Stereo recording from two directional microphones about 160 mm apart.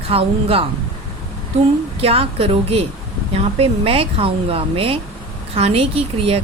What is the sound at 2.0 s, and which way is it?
Speech, 35° right (ahead or behind).